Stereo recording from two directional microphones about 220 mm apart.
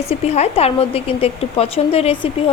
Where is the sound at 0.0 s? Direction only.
30° left (ahead or behind).